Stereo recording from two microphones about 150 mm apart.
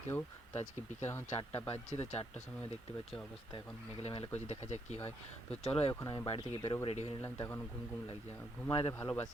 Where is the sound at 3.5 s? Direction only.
40° left (ahead or behind).